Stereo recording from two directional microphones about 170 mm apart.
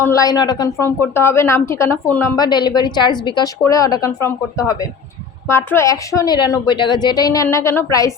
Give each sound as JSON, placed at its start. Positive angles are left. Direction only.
{"t": 0.0, "sound": "speech", "side_deg": 20}
{"t": 2.3, "sound": "a woman's voice", "side_deg": 25}